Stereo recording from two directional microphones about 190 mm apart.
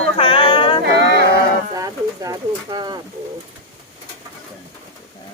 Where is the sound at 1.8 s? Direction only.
20° right (ahead or behind).